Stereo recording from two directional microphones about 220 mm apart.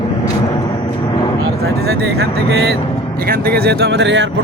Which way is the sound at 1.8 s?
45° right (ahead or behind).